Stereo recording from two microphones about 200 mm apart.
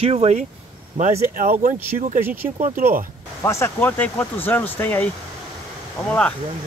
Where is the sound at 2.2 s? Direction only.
10° right (ahead or behind).